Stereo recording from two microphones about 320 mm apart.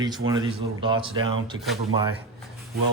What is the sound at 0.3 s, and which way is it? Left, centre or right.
Speech, centre.